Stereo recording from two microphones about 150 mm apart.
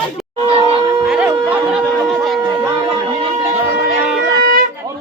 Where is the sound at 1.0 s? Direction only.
5° right (ahead or behind).